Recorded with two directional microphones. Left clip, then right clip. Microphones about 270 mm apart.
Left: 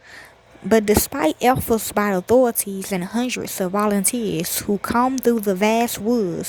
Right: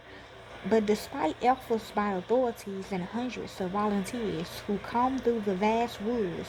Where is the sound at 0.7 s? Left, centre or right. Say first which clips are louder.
Left 10 dB; left.